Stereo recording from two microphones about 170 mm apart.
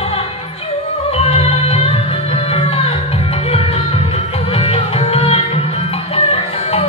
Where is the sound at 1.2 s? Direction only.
35° left (ahead or behind).